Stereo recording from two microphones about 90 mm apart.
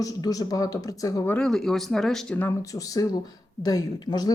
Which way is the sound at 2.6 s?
40° left (ahead or behind).